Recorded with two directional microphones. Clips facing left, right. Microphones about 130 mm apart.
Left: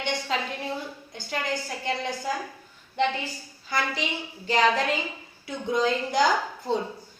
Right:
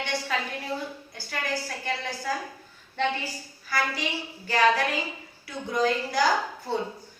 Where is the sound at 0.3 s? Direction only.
25° left (ahead or behind).